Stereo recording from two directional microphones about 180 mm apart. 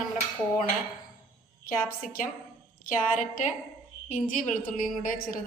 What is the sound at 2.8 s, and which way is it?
A woman's voice, 45° left (ahead or behind).